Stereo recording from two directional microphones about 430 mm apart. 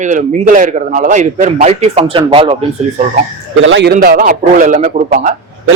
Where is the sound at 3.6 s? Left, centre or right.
Right.